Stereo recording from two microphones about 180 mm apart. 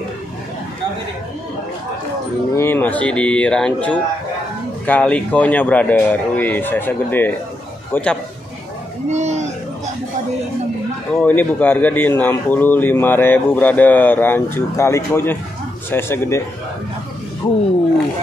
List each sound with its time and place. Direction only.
2.5 s speech: 10° left (ahead or behind)
9.1 s speech: 40° right (ahead or behind)
11.1 s speech: 10° left (ahead or behind)